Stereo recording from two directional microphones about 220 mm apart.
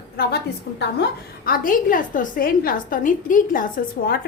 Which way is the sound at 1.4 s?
40° left (ahead or behind).